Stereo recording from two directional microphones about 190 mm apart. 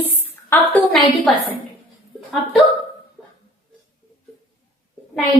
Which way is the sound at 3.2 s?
5° left (ahead or behind).